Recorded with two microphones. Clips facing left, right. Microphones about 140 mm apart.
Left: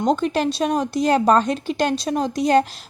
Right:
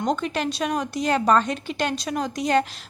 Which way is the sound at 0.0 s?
35° left (ahead or behind).